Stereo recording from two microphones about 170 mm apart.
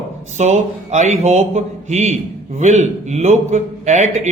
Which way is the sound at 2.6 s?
45° right (ahead or behind).